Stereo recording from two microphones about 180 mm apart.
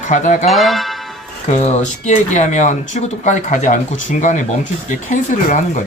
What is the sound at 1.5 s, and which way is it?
Speech, 40° left (ahead or behind).